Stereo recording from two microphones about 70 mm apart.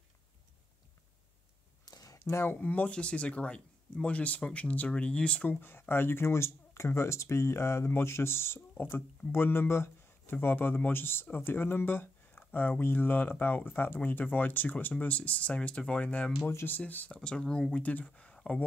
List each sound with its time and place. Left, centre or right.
1.9 s a sound: left
2.6 s speech: left
16.4 s speech: left; by 18.6 s centre